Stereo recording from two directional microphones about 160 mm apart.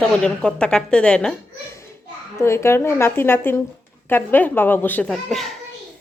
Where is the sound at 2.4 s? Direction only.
15° left (ahead or behind); by 5.5 s centre (ahead or behind).